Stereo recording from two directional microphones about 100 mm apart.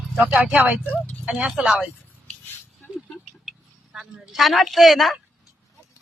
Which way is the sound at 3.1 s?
5° right (ahead or behind).